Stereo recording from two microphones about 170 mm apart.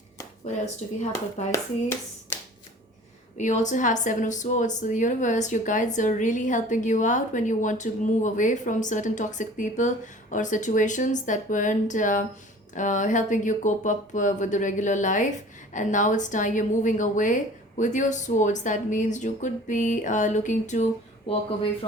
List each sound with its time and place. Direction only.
1.5 s speech: 15° left (ahead or behind)
3.3 s speech: 45° left (ahead or behind)